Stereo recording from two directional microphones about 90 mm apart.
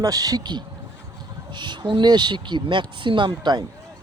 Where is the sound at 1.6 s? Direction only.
60° right (ahead or behind).